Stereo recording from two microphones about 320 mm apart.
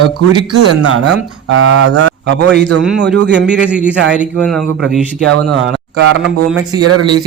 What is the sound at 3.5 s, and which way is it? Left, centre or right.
A man's voice, centre.